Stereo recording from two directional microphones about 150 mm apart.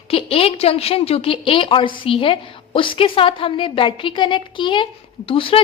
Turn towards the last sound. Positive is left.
turn(degrees=35)  # may be behind; listen again after turning